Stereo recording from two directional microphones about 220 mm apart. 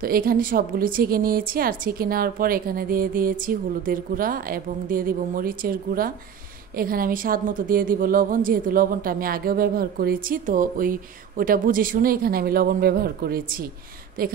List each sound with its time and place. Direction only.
0.0 s a woman's voice: 40° right (ahead or behind)